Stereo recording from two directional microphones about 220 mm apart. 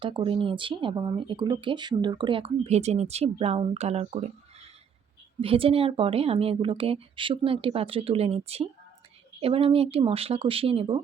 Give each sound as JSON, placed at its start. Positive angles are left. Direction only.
{"t": 0.0, "sound": "speech", "side_deg": -20}
{"t": 5.4, "sound": "speech", "side_deg": -25}